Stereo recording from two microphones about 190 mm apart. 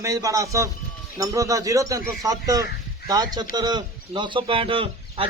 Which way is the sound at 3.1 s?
20° right (ahead or behind).